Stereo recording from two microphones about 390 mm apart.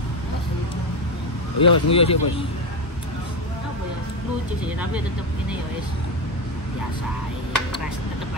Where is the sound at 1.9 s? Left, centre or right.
Centre.